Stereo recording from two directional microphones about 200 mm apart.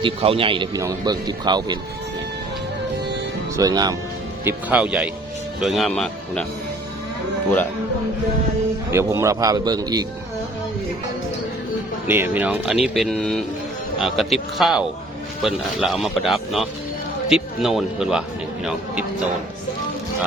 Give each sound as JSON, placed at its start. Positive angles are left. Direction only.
{"t": 0.0, "sound": "speech", "side_deg": -25}
{"t": 3.5, "sound": "speech", "side_deg": -20}
{"t": 4.4, "sound": "a man's voice", "side_deg": -5}
{"t": 8.9, "sound": "a man's voice", "side_deg": -15}
{"t": 12.0, "sound": "speech", "side_deg": -10}